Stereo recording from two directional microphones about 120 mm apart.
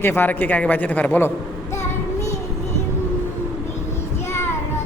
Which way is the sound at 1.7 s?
25° left (ahead or behind).